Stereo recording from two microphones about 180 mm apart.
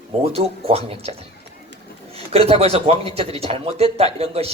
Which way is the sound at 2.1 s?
35° right (ahead or behind).